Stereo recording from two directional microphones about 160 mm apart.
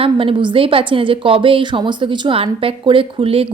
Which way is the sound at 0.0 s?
35° right (ahead or behind).